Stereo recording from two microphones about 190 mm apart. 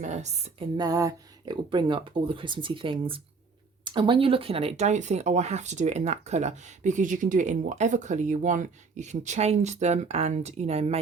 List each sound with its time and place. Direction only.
0.0 s speech: 35° right (ahead or behind)
0.8 s speech: 20° right (ahead or behind); by 10.9 s 35° right (ahead or behind)